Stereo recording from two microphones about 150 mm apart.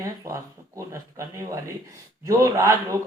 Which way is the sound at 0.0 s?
20° right (ahead or behind).